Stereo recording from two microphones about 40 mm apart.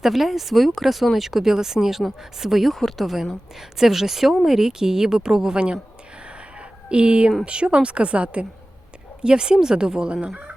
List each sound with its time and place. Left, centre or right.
0.0 s a woman's voice: centre; by 5.8 s right
6.6 s a sound: right
7.4 s speech: right
9.2 s speech: right